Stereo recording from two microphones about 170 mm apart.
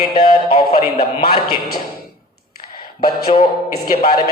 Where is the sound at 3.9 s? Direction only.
60° left (ahead or behind).